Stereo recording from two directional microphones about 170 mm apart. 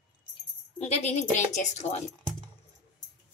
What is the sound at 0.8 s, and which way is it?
A woman's voice, 40° left (ahead or behind).